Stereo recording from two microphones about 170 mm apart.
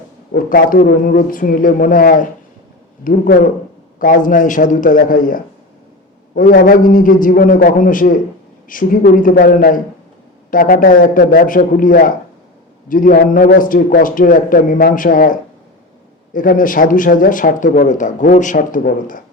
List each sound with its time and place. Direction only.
0.3 s speech: 55° left (ahead or behind)